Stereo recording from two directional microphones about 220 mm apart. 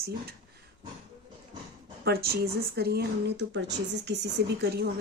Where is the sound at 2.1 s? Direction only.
45° right (ahead or behind).